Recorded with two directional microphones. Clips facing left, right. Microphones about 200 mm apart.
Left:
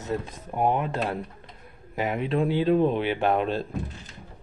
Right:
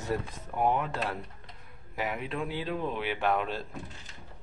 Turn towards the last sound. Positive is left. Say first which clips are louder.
# left 5 dB
turn(degrees=25)  # may be behind; listen again after turning